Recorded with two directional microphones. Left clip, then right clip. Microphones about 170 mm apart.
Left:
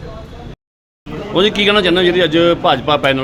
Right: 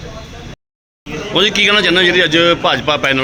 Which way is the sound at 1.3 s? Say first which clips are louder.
Right 1 dB; 5° left (ahead or behind).